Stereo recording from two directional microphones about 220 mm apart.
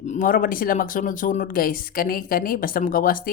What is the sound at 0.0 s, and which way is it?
Speech, 35° left (ahead or behind).